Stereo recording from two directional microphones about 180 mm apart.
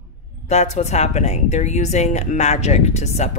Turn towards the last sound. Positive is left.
turn(degrees=40)  # may be behind; listen again after turning